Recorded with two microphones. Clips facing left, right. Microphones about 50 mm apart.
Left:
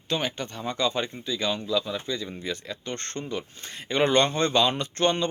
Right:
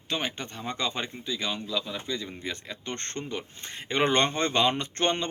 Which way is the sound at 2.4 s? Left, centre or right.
Right.